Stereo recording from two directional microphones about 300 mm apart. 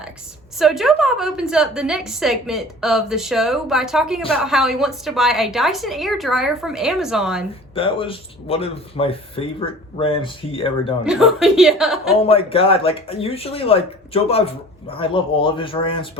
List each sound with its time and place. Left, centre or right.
0.6 s a woman's voice: centre
7.8 s speech: centre
11.0 s a woman's voice: centre
12.2 s speech: centre